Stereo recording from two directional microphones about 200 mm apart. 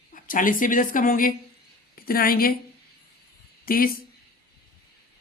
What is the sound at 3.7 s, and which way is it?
Speech, 45° left (ahead or behind).